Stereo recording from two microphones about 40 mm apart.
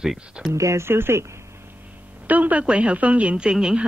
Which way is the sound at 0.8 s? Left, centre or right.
Right.